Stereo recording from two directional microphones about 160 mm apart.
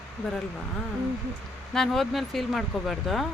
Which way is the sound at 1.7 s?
Centre (ahead or behind).